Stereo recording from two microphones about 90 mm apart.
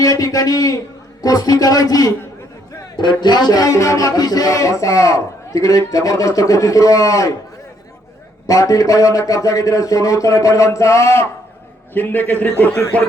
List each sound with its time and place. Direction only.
0.0 s a man's voice: 40° left (ahead or behind)
2.9 s speech: 60° left (ahead or behind); by 7.3 s 40° left (ahead or behind)
8.4 s speech: 40° left (ahead or behind)
11.9 s a man's voice: 20° left (ahead or behind)